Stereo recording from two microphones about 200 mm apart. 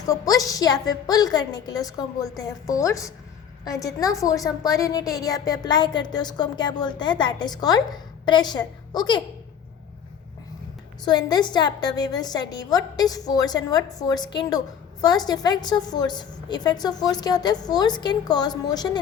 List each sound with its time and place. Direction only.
0.0 s a woman's voice: 15° left (ahead or behind)
11.0 s a woman's voice: 20° left (ahead or behind)